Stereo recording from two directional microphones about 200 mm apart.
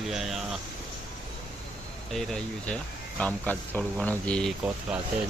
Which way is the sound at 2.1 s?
Centre (ahead or behind).